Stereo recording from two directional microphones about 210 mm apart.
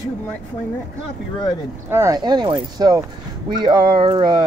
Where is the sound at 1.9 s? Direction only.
15° right (ahead or behind).